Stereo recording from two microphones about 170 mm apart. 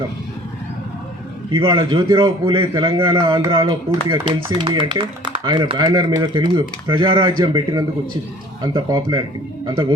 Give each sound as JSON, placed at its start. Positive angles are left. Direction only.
{"t": 1.5, "sound": "speech", "side_deg": -30}